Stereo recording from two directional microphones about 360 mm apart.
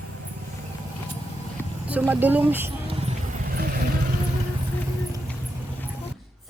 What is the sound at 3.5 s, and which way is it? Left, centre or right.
Vehicle, right.